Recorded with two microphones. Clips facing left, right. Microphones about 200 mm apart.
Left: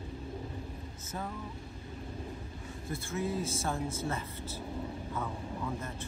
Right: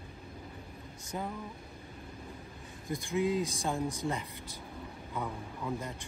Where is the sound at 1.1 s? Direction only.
15° right (ahead or behind).